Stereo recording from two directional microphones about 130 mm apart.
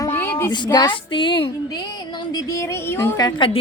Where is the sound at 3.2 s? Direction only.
30° left (ahead or behind).